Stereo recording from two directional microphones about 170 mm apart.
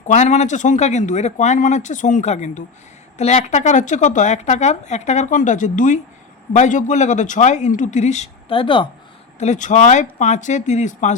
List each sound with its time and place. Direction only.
0.1 s a woman's voice: 40° left (ahead or behind)
9.4 s a woman's voice: 45° left (ahead or behind)